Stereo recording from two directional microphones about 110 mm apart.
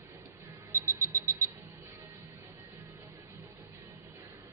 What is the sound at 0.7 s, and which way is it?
Music, 15° right (ahead or behind).